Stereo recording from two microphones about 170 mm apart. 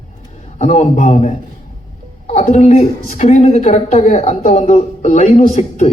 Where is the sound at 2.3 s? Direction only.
40° left (ahead or behind).